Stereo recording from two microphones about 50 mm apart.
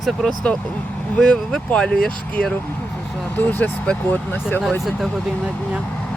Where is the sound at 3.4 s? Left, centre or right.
Left.